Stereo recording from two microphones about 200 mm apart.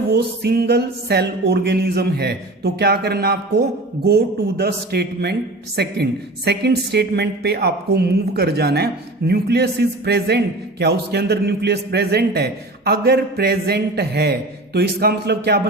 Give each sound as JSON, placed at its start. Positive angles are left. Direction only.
{"t": 0.1, "sound": "speech", "side_deg": -55}